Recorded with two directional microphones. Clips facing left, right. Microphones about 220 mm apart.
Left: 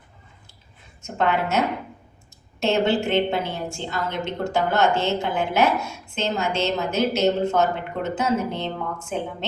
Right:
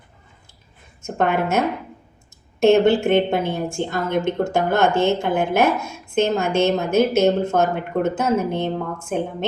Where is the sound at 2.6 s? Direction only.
50° right (ahead or behind).